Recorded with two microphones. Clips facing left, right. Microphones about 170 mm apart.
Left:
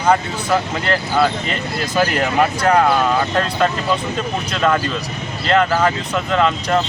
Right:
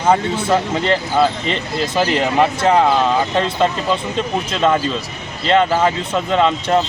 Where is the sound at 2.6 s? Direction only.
20° right (ahead or behind).